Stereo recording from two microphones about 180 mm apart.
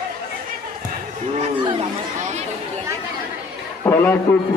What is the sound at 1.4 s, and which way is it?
Chatter, 30° right (ahead or behind).